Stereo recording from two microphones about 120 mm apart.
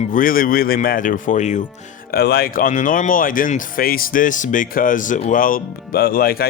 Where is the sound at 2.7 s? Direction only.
90° left.